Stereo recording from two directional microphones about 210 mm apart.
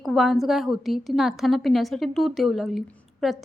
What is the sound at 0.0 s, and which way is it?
A woman's voice, centre (ahead or behind).